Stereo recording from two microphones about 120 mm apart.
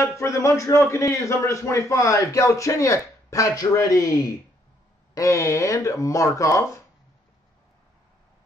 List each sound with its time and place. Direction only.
0.2 s a man's voice: 25° left (ahead or behind)